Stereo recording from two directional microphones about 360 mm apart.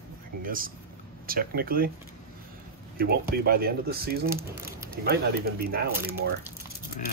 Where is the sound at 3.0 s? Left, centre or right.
Right.